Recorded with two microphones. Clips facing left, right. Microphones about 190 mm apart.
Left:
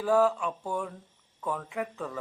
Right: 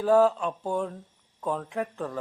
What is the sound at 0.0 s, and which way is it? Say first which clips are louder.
Chopping: right 3 dB; 15° right (ahead or behind).